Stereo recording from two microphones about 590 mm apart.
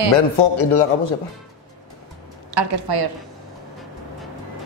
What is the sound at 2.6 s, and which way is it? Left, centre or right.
Speech, right.